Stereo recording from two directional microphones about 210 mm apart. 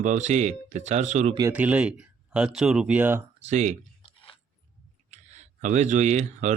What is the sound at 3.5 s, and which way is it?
Speech, 35° right (ahead or behind).